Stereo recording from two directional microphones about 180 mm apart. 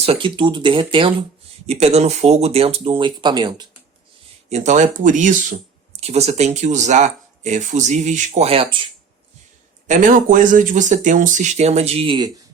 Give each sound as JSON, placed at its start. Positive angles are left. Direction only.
{"t": 0.0, "sound": "speech", "side_deg": -30}
{"t": 4.4, "sound": "speech", "side_deg": -40}
{"t": 9.8, "sound": "speech", "side_deg": -45}